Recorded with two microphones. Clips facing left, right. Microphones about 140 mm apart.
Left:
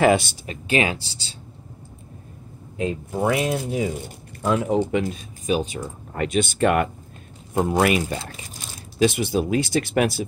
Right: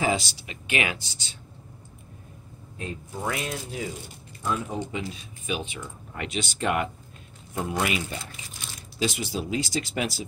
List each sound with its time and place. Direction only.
0.0 s speech: 60° left (ahead or behind)
0.7 s speech: 30° left (ahead or behind)
2.8 s speech: 80° left
5.0 s speech: 45° left (ahead or behind)
8.0 s speech: 40° left (ahead or behind)
9.0 s speech: 60° left (ahead or behind)